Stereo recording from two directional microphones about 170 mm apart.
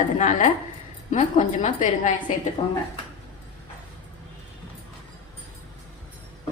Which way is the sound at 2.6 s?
35° left (ahead or behind).